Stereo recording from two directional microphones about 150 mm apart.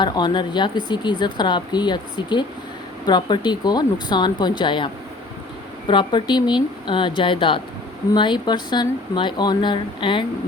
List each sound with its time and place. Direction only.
0.0 s speech: 30° left (ahead or behind)
5.9 s speech: 30° left (ahead or behind)